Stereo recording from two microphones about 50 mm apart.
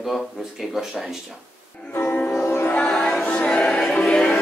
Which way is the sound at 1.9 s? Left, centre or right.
Left.